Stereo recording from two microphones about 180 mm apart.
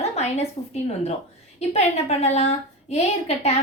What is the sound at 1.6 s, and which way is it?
A woman's voice, 35° left (ahead or behind).